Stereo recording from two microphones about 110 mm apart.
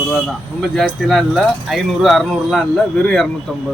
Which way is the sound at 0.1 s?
Centre (ahead or behind).